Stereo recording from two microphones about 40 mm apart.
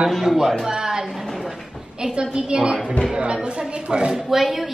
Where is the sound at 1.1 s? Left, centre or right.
Centre.